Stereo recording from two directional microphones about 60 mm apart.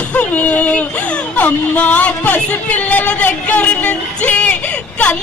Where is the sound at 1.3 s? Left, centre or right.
Left.